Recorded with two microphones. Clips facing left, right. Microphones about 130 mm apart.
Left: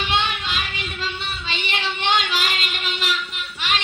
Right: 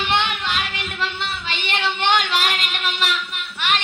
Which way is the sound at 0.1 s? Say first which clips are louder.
Right 2 dB; 60° right (ahead or behind).